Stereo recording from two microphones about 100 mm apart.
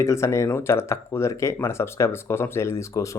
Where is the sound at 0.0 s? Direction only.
25° left (ahead or behind).